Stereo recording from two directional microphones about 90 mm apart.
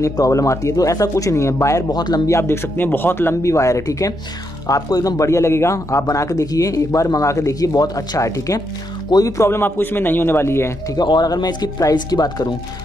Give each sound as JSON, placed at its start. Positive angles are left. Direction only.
{"t": 0.0, "sound": "a man's voice", "side_deg": 35}
{"t": 2.2, "sound": "a man's voice", "side_deg": 30}
{"t": 11.0, "sound": "speech", "side_deg": 50}